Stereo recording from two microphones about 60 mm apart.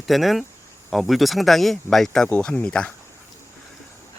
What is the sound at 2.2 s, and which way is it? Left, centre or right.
Speech, centre.